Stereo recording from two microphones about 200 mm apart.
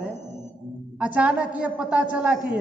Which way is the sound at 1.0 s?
5° right (ahead or behind).